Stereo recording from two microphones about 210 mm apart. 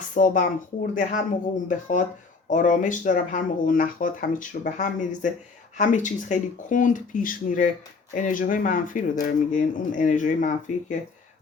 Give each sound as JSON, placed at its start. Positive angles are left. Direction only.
{"t": 0.1, "sound": "speech", "side_deg": 40}